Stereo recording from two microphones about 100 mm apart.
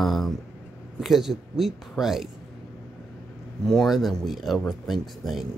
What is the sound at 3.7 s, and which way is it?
Speech, 5° left (ahead or behind).